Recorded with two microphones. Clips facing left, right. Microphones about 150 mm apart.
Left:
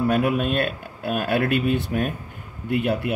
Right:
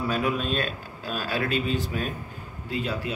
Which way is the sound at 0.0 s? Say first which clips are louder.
Left 6 dB; 55° left (ahead or behind).